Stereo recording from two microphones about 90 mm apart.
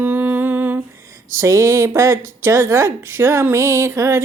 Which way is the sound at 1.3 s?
35° right (ahead or behind).